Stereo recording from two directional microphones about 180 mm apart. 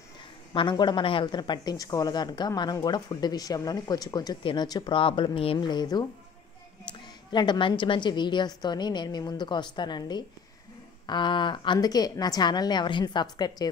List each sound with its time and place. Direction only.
0.5 s a woman's voice: 25° left (ahead or behind)